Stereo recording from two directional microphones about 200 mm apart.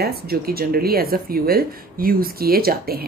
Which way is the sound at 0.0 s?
50° right (ahead or behind).